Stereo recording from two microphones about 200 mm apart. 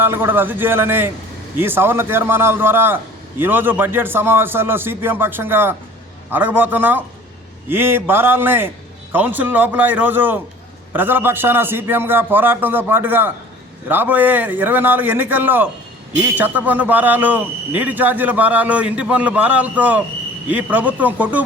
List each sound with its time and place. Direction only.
0.0 s a man's voice: 10° right (ahead or behind)